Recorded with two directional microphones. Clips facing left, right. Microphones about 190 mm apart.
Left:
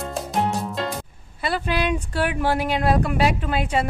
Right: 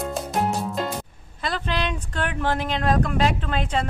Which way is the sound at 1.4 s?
10° left (ahead or behind).